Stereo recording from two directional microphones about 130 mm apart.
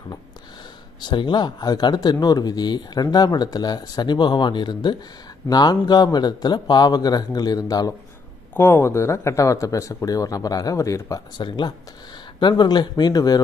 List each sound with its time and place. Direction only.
1.0 s speech: 35° left (ahead or behind)
8.5 s speech: 15° left (ahead or behind)